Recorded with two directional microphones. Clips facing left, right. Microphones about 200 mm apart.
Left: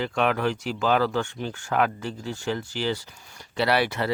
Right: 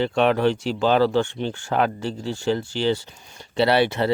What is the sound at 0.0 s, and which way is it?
Speech, 30° right (ahead or behind).